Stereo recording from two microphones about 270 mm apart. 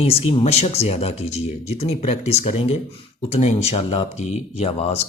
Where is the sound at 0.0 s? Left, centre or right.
Left.